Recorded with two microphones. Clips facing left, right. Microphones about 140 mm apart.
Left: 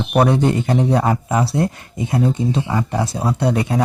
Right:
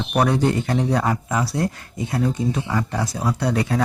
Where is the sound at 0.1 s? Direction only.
25° left (ahead or behind).